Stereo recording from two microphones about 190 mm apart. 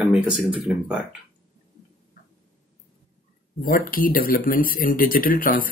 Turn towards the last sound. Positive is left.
turn(degrees=50)  # may be behind; listen again after turning